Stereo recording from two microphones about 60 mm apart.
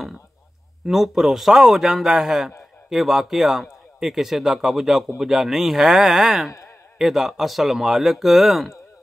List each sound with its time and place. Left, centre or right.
0.8 s a man's voice: centre